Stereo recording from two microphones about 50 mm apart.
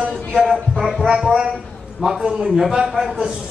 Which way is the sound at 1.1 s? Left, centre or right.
Centre.